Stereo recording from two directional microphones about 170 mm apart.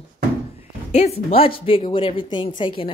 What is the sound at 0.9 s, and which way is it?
A woman's voice, 40° left (ahead or behind).